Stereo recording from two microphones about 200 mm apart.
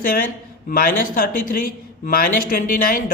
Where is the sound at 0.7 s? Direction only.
45° left (ahead or behind).